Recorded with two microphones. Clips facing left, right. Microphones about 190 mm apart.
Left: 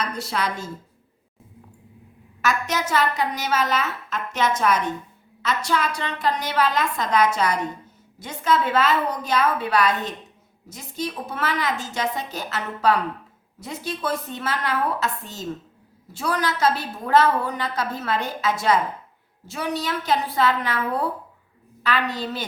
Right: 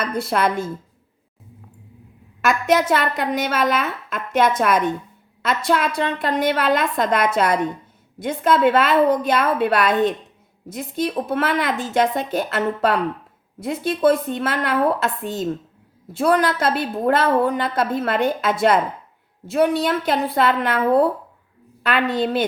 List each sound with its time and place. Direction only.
0.0 s a woman's voice: 55° right (ahead or behind)
2.5 s a woman's voice: 55° right (ahead or behind)